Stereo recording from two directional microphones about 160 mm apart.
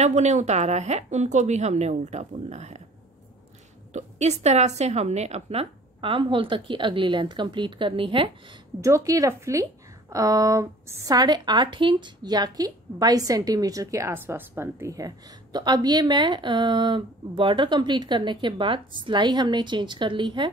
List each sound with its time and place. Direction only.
0.0 s speech: 45° right (ahead or behind)
3.9 s a woman's voice: 45° right (ahead or behind)
8.8 s a woman's voice: 20° right (ahead or behind)